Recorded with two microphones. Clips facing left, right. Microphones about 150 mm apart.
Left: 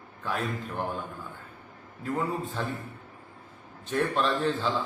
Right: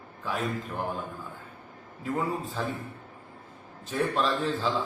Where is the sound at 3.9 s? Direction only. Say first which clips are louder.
Left 1 dB; centre (ahead or behind).